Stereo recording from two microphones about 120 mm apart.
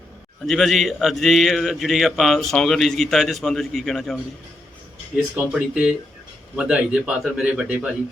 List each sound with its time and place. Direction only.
0.4 s speech: centre (ahead or behind)
5.1 s a man's voice: 10° right (ahead or behind)